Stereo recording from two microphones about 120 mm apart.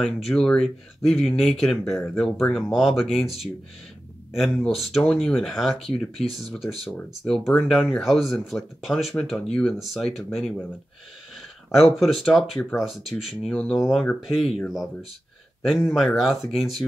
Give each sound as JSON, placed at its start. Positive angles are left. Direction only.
{"t": 0.0, "sound": "speech", "side_deg": 5}
{"t": 4.3, "sound": "speech", "side_deg": 0}
{"t": 11.7, "sound": "speech", "side_deg": 0}